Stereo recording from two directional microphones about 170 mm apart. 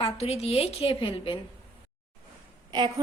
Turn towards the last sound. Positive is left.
turn(degrees=-25)  # may be behind; listen again after turning